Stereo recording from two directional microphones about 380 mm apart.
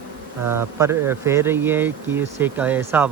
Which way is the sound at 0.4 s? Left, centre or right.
Centre.